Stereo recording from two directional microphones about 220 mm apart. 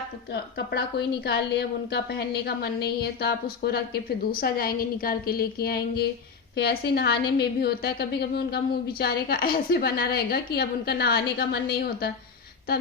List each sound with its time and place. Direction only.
0.5 s a woman's voice: 45° left (ahead or behind)